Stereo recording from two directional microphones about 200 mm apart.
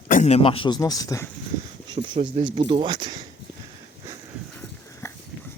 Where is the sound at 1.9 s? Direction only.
25° right (ahead or behind).